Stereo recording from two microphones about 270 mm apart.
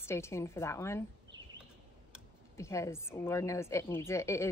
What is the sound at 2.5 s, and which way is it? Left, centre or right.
Speech, centre.